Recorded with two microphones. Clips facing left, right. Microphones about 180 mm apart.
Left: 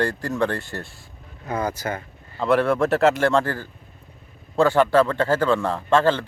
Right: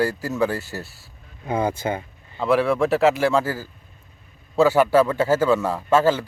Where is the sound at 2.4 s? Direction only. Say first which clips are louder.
Even; centre (ahead or behind).